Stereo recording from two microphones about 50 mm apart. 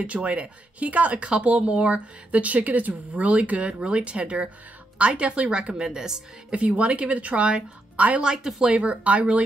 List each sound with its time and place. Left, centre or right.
0.0 s a woman's voice: right
5.8 s a woman's voice: centre
6.5 s a woman's voice: right
8.2 s a woman's voice: centre
8.6 s a woman's voice: right